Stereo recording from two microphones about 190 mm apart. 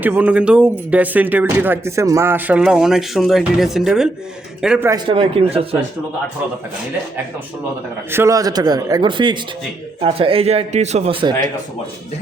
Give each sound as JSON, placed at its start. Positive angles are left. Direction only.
{"t": 0.0, "sound": "a man's voice", "side_deg": -10}
{"t": 4.9, "sound": "a man's voice", "side_deg": -25}
{"t": 8.1, "sound": "a man's voice", "side_deg": -15}